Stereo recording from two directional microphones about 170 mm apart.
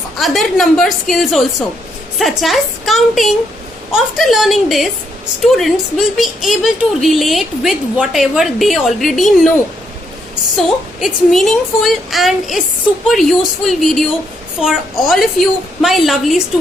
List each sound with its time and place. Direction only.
0.2 s speech: centre (ahead or behind)
11.0 s speech: centre (ahead or behind)